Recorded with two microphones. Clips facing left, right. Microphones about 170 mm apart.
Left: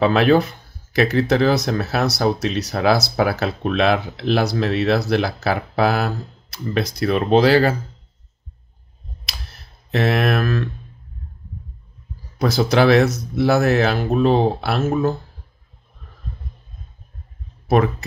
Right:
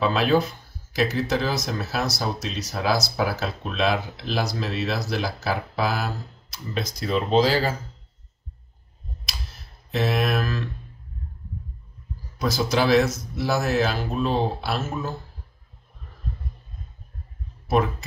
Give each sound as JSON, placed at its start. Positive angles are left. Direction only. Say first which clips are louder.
{"t": 0.0, "sound": "speech", "louder": "left 6 dB", "side_deg": 65}
{"t": 9.2, "sound": "a sound", "louder": "left 2 dB", "side_deg": 65}
{"t": 12.4, "sound": "speech", "louder": "left 6 dB", "side_deg": 60}
{"t": 17.6, "sound": "speech", "louder": "left 5 dB", "side_deg": 60}